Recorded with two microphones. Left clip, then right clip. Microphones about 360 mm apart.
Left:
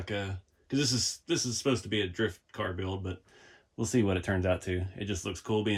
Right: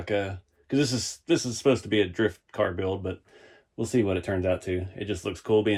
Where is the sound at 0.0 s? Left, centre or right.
Centre.